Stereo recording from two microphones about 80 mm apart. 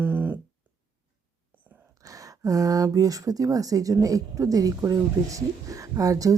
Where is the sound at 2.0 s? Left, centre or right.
Right.